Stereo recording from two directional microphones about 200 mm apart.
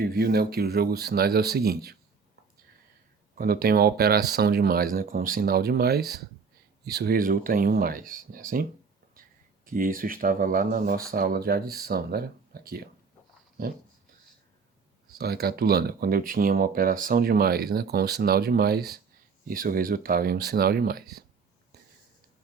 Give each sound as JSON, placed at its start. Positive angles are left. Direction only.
{"t": 0.0, "sound": "speech", "side_deg": -50}
{"t": 3.3, "sound": "speech", "side_deg": -50}
{"t": 9.6, "sound": "speech", "side_deg": -45}
{"t": 15.1, "sound": "speech", "side_deg": -50}